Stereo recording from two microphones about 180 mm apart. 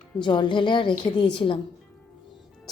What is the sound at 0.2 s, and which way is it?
A woman's voice, 25° left (ahead or behind).